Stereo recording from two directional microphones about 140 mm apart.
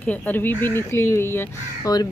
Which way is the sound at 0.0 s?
10° left (ahead or behind).